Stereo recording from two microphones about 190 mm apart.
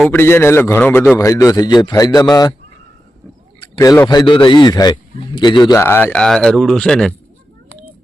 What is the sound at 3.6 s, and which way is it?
Speech, 20° left (ahead or behind).